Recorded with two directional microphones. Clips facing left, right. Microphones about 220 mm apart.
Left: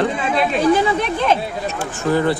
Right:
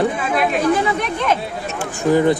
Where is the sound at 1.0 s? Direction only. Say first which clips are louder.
Left 2 dB; 30° left (ahead or behind).